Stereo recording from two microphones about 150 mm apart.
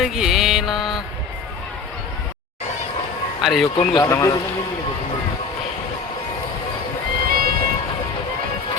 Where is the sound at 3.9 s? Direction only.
25° left (ahead or behind).